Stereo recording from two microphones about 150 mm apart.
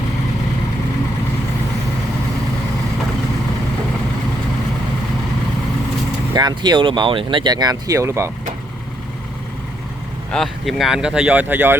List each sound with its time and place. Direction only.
6.3 s speech: 30° right (ahead or behind)
10.3 s speech: centre (ahead or behind)